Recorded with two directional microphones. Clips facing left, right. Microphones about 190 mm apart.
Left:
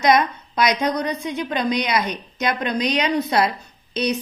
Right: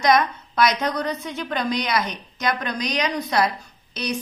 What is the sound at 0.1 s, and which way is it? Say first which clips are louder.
A woman's voice: left 1 dB; 20° left (ahead or behind).